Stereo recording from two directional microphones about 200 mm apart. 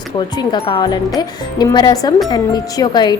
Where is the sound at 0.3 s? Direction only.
25° left (ahead or behind).